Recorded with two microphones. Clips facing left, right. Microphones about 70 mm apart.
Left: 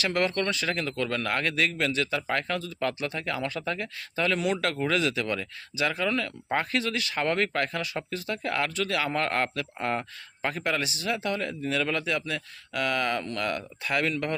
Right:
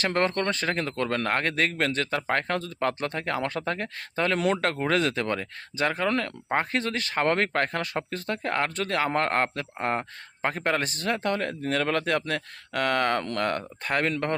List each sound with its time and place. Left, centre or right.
0.0 s speech: right
6.5 s speech: right